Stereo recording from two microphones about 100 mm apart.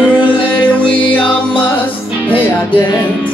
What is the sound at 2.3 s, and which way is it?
Music, 15° left (ahead or behind).